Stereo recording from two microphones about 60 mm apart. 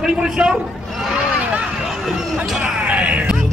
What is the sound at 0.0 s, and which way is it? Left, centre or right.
Speech, centre.